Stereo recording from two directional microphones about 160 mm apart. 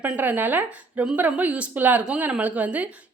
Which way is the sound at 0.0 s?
10° right (ahead or behind).